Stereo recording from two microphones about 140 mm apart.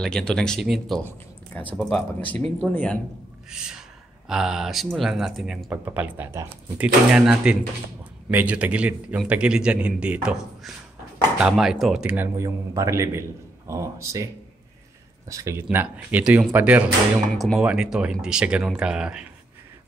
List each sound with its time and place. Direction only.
0.0 s speech: 5° left (ahead or behind)
3.4 s speech: 5° right (ahead or behind)
5.7 s speech: 15° right (ahead or behind)
12.4 s a man's voice: 20° right (ahead or behind); by 19.2 s 5° right (ahead or behind)